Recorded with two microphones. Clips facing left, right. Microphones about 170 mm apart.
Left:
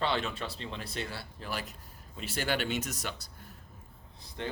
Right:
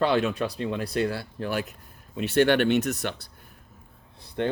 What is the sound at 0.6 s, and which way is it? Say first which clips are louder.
Speech: right 12 dB; 60° right (ahead or behind).